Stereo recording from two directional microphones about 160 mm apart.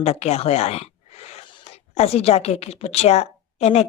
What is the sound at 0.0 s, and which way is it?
Speech, 40° left (ahead or behind).